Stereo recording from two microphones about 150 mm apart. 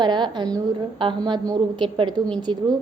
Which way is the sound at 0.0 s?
30° right (ahead or behind).